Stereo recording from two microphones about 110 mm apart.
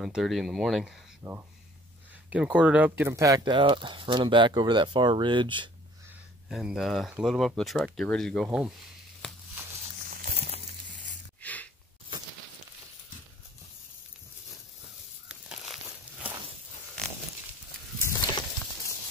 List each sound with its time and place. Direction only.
0.0 s speech: centre (ahead or behind)
1.2 s speech: 15° right (ahead or behind)
3.2 s speech: 30° right (ahead or behind)
3.4 s speech: 50° right (ahead or behind)
6.5 s speech: 5° right (ahead or behind)
8.5 s speech: 5° right (ahead or behind)
9.2 s a sound: 5° left (ahead or behind)
10.4 s crumpling: 70° right (ahead or behind)
11.4 s a sound: 15° left (ahead or behind)
15.2 s crumpling: 10° right (ahead or behind)